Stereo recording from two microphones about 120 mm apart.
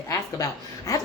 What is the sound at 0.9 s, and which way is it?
Speech, 30° left (ahead or behind).